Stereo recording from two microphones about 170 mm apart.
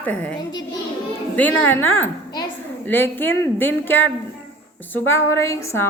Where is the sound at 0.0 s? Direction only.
10° left (ahead or behind).